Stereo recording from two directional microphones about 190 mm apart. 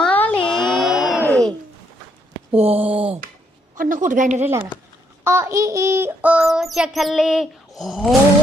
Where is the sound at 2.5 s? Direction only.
30° right (ahead or behind).